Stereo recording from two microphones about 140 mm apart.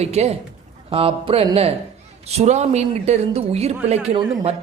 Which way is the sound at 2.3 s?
50° right (ahead or behind).